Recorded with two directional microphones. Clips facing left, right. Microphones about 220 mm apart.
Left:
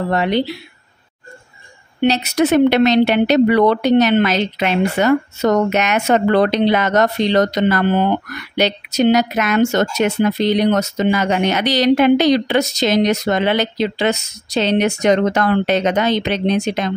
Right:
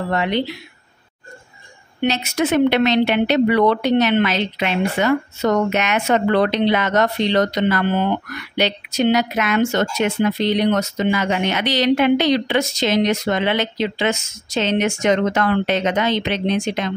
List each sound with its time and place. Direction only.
0.1 s speech: 40° left (ahead or behind)
2.0 s speech: 35° left (ahead or behind)